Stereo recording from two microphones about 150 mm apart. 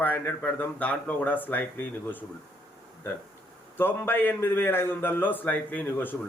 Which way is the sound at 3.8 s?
15° left (ahead or behind).